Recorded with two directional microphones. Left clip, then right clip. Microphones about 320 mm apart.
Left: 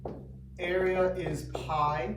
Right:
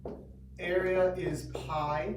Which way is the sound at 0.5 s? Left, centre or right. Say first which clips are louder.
Left 1 dB; centre.